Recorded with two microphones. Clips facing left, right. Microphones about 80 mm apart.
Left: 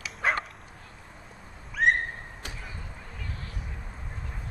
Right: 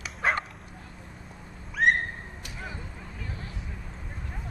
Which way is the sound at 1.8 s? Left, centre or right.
Centre.